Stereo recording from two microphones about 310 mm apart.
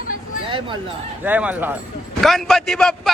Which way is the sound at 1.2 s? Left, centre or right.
Centre.